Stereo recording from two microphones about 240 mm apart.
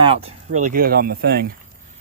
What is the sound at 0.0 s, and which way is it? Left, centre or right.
Speech, right.